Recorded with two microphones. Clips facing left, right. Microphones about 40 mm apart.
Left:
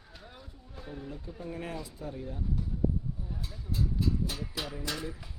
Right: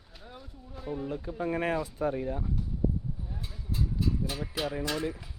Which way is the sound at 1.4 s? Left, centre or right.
Right.